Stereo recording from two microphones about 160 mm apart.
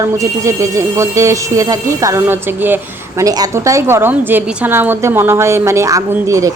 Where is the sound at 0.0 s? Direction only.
20° right (ahead or behind).